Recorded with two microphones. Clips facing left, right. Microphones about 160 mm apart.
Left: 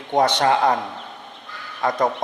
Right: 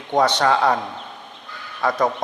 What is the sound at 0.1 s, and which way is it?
Speech, 20° left (ahead or behind).